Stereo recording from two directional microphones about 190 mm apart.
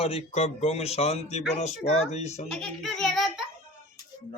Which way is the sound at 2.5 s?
Centre (ahead or behind).